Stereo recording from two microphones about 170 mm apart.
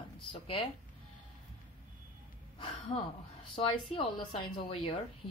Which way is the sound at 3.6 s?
35° left (ahead or behind).